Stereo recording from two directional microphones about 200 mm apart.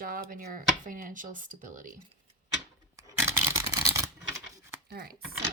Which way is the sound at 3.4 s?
10° right (ahead or behind).